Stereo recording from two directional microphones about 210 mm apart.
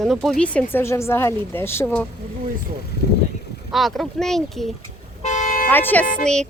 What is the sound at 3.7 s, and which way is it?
Speech, centre (ahead or behind).